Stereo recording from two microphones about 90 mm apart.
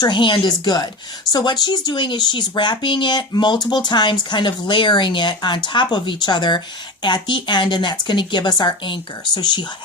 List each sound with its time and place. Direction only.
0.0 s speech: 60° left (ahead or behind)